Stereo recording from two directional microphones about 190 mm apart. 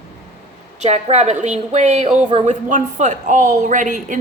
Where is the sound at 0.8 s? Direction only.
35° right (ahead or behind).